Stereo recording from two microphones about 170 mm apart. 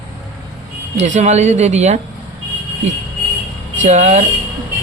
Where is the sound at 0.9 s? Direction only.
40° right (ahead or behind).